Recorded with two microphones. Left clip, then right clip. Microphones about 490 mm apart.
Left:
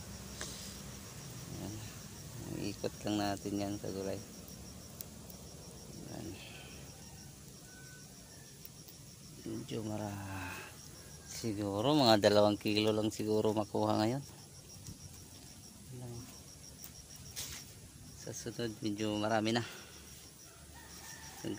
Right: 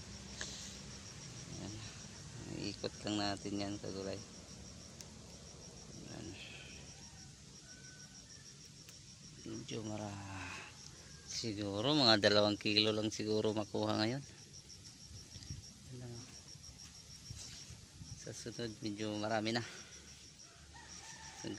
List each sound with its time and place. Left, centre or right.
0.4 s a sound: right
2.5 s speech: right
6.1 s a sound: right
9.7 s speech: right
18.2 s speech: right
21.4 s speech: right